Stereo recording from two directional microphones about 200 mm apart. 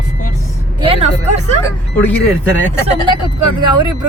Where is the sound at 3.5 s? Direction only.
20° right (ahead or behind).